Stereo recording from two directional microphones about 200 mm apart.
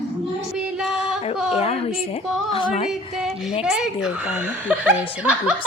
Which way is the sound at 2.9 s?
Centre (ahead or behind).